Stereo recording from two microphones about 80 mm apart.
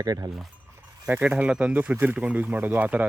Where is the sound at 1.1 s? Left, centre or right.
Centre.